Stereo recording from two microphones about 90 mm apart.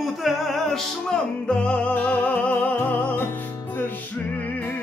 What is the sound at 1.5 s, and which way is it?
Music, 10° left (ahead or behind).